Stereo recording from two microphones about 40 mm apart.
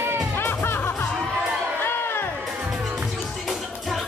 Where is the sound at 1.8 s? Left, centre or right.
Left.